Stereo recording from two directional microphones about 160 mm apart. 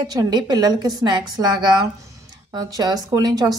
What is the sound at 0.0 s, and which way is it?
A woman's voice, 25° right (ahead or behind).